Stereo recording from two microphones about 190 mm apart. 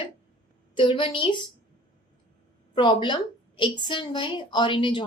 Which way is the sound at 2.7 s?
25° left (ahead or behind).